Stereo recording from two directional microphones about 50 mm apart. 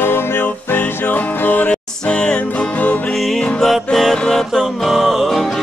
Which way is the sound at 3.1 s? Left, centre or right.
Centre.